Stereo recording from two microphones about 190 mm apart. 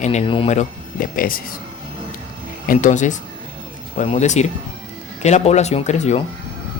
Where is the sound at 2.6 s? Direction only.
45° left (ahead or behind).